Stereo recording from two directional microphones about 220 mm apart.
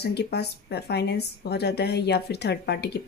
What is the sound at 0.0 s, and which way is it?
Speech, 50° left (ahead or behind).